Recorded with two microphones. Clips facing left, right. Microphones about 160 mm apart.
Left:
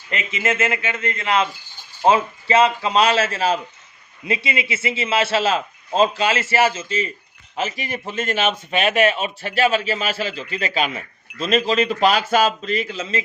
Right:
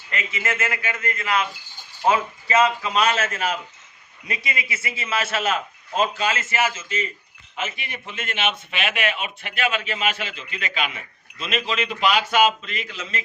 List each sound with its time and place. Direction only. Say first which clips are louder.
0.1 s a man's voice: left 5 dB; 20° left (ahead or behind)